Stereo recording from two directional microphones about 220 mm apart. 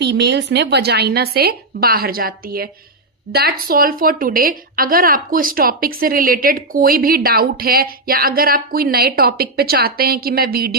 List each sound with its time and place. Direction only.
0.0 s a woman's voice: 50° right (ahead or behind)